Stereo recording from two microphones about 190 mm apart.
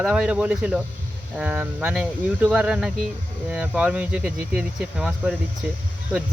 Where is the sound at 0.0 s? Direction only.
5° right (ahead or behind).